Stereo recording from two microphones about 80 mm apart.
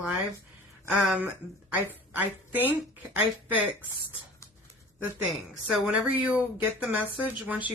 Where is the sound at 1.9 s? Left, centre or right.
Right.